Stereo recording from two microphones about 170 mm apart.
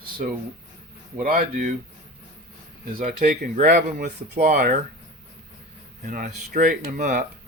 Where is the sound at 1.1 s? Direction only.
55° right (ahead or behind).